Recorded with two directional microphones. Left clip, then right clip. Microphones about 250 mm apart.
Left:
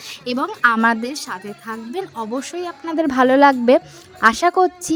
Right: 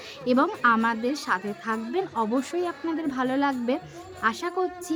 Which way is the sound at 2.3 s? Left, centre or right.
Left.